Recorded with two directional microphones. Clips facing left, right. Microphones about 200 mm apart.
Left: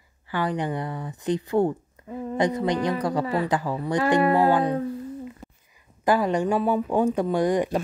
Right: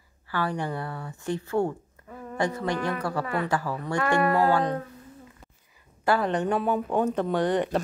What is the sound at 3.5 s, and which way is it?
Speech, 15° left (ahead or behind).